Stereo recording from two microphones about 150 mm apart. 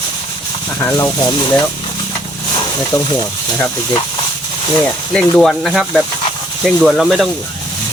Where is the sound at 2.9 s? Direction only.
20° left (ahead or behind).